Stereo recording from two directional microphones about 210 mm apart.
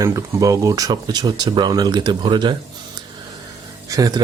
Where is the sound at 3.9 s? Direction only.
15° right (ahead or behind).